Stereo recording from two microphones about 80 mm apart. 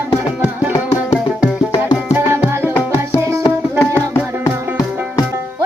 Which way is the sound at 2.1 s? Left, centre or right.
Right.